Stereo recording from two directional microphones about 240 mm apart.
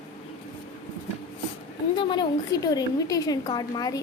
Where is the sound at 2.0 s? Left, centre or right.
Centre.